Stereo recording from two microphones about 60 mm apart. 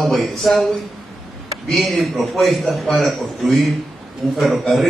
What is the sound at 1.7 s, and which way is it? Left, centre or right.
A man's voice, centre.